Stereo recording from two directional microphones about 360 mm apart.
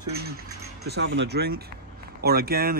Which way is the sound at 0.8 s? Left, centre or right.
Right.